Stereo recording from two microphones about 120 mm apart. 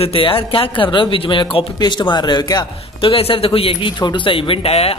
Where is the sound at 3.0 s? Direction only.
50° left (ahead or behind).